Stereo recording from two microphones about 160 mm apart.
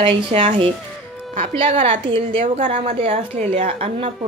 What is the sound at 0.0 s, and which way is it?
Speech, 35° right (ahead or behind).